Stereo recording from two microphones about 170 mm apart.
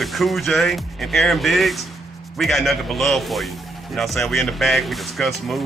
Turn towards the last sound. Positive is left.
turn(degrees=0)  # may be behind; listen again after turning